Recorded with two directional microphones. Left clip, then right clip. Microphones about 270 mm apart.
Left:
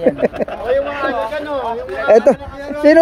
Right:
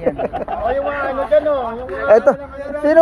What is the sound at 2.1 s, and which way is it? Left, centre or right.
Speech, left.